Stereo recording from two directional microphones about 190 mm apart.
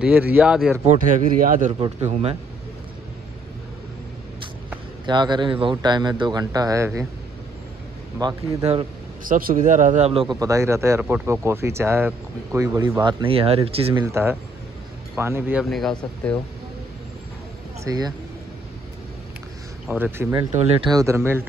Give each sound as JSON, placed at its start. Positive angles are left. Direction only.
{"t": 0.0, "sound": "speech", "side_deg": -10}
{"t": 0.8, "sound": "speech", "side_deg": -40}
{"t": 1.7, "sound": "speech", "side_deg": -30}
{"t": 5.0, "sound": "speech", "side_deg": -25}
{"t": 8.2, "sound": "speech", "side_deg": -20}
{"t": 9.2, "sound": "speech", "side_deg": -45}
{"t": 14.0, "sound": "speech", "side_deg": -15}
{"t": 15.6, "sound": "speech", "side_deg": 0}
{"t": 17.8, "sound": "speech", "side_deg": -20}
{"t": 19.9, "sound": "speech", "side_deg": -10}
{"t": 20.5, "sound": "speech", "side_deg": -30}
{"t": 20.9, "sound": "speech", "side_deg": -15}